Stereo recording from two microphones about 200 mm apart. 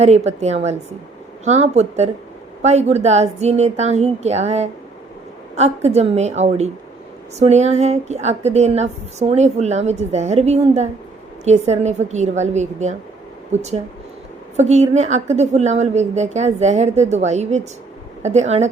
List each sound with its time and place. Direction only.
0.0 s a woman's voice: 35° right (ahead or behind)